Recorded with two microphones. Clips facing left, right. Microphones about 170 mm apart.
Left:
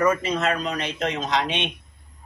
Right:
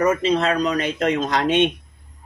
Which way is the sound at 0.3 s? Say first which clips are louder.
Right 5 dB; 40° right (ahead or behind).